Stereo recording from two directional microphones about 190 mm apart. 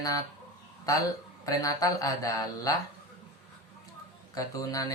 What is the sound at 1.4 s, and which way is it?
Speech, 20° left (ahead or behind).